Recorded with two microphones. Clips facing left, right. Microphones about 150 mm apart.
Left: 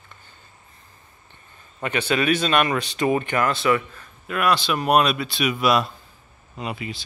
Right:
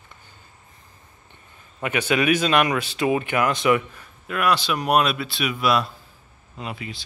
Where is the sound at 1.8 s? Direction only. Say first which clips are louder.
Right 1 dB; 10° right (ahead or behind).